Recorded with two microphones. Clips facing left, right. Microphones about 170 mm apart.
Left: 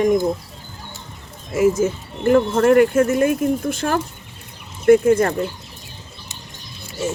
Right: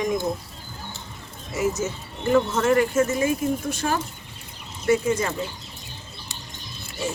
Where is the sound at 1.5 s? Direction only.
50° left (ahead or behind).